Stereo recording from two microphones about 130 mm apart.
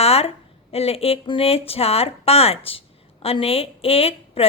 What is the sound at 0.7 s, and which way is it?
Speech, 50° left (ahead or behind).